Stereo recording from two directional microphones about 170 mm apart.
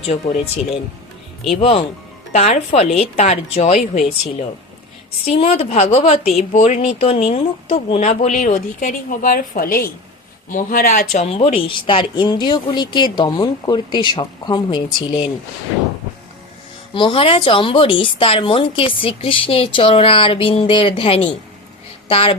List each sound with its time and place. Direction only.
0.0 s a woman's voice: 40° left (ahead or behind)
16.9 s a woman's voice: 30° left (ahead or behind)